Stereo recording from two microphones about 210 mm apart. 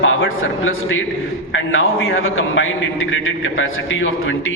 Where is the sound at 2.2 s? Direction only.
75° left (ahead or behind).